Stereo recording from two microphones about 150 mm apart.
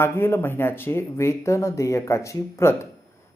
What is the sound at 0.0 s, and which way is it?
Speech, 15° left (ahead or behind).